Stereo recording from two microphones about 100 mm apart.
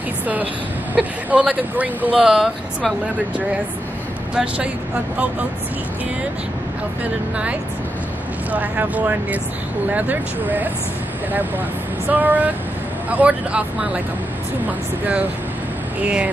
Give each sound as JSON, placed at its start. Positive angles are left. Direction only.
{"t": 0.9, "sound": "speech", "side_deg": -15}
{"t": 8.5, "sound": "speech", "side_deg": -15}
{"t": 12.1, "sound": "speech", "side_deg": -15}
{"t": 16.0, "sound": "speech", "side_deg": -10}